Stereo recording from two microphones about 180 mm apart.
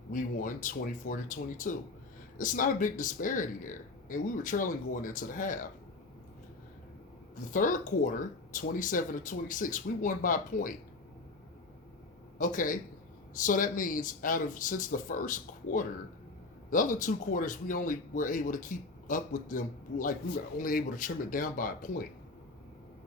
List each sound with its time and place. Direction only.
0.1 s speech: 45° left (ahead or behind)
7.5 s speech: 45° left (ahead or behind)
12.4 s speech: 50° left (ahead or behind)